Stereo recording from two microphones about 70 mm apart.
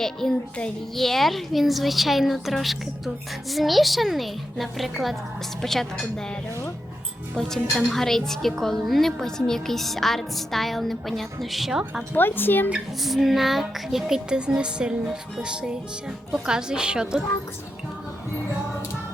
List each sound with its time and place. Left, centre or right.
0.0 s a woman's voice: centre
7.3 s a woman's voice: centre
12.1 s speech: left
13.0 s speech: centre